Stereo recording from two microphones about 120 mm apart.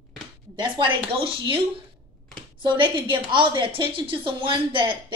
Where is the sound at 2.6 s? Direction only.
40° right (ahead or behind).